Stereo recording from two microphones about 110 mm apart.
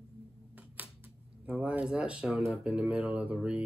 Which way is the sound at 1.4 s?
10° right (ahead or behind).